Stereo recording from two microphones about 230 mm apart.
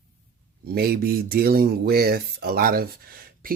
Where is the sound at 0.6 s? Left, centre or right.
Right.